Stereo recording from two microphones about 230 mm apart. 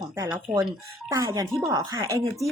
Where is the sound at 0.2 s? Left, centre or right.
Centre.